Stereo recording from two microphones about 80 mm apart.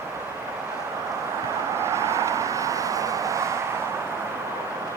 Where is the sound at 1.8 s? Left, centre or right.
Right.